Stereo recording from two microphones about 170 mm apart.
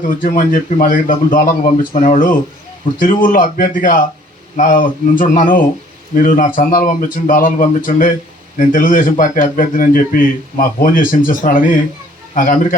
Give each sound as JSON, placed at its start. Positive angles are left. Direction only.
{"t": 0.1, "sound": "a man's voice", "side_deg": 50}